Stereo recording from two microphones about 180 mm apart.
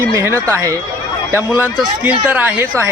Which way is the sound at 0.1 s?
15° right (ahead or behind).